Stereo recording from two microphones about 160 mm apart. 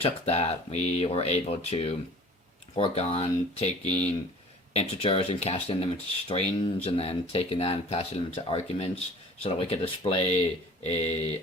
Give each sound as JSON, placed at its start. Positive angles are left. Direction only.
{"t": 0.0, "sound": "speech", "side_deg": 40}